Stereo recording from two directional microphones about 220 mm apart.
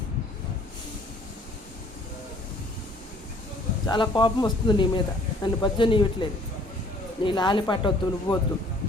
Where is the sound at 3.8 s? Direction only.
20° left (ahead or behind).